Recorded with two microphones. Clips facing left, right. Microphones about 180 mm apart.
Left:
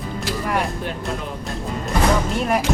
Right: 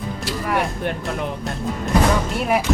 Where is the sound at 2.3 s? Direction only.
5° right (ahead or behind).